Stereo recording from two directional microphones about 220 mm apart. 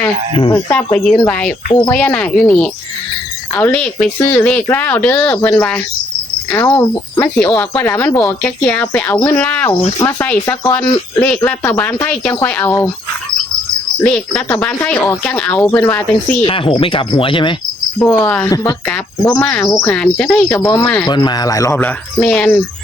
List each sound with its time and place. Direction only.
0.5 s speech: 10° left (ahead or behind)
14.0 s speech: 5° left (ahead or behind)
16.4 s speech: 25° left (ahead or behind)
18.0 s speech: 5° left (ahead or behind)
18.4 s speech: 15° left (ahead or behind)
21.1 s speech: 20° left (ahead or behind)